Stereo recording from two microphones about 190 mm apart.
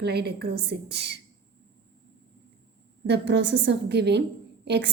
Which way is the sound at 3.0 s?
65° right (ahead or behind).